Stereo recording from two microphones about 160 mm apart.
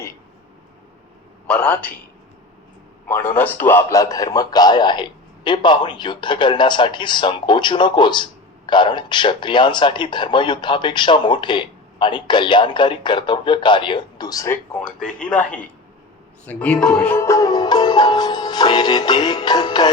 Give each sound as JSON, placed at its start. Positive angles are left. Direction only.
{"t": 1.5, "sound": "a man's voice", "side_deg": 5}
{"t": 3.1, "sound": "a man's voice", "side_deg": 10}